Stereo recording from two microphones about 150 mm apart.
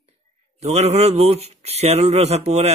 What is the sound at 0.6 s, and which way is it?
Speech, 45° right (ahead or behind).